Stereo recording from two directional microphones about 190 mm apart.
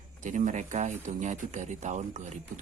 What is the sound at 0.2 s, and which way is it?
Speech, 40° right (ahead or behind).